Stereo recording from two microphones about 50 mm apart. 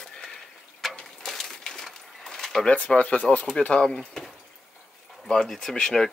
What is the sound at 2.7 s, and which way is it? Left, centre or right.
Speech, left.